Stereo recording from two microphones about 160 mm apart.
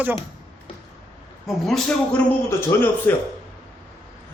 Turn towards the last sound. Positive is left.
turn(degrees=15)  # may be behind; listen again after turning